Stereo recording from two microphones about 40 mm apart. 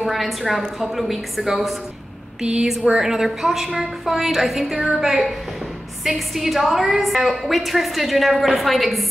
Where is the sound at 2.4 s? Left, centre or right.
Centre.